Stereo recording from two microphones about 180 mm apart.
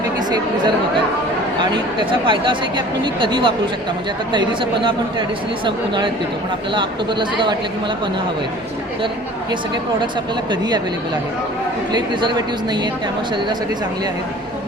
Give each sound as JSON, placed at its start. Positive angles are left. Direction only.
{"t": 1.7, "sound": "speech", "side_deg": -25}
{"t": 10.5, "sound": "speech", "side_deg": -25}
{"t": 11.9, "sound": "speech", "side_deg": -25}